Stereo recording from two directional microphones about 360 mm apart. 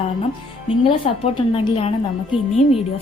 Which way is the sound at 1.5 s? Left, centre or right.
Centre.